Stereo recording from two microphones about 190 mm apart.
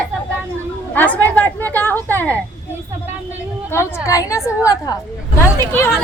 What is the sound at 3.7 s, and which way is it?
Speech, 15° left (ahead or behind).